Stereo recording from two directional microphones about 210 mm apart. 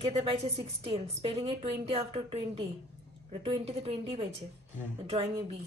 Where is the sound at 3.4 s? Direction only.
25° right (ahead or behind).